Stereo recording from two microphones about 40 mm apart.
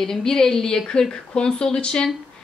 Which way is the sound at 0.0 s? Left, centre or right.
Centre.